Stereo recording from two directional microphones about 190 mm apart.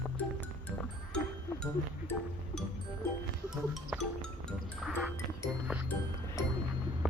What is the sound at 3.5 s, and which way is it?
Music, centre (ahead or behind).